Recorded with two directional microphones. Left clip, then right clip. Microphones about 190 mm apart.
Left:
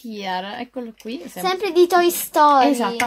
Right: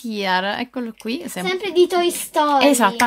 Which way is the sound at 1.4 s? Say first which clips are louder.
Left 1 dB; 30° left (ahead or behind).